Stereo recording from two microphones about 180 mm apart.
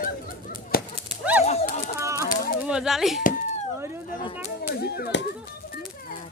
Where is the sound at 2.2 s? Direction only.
50° left (ahead or behind).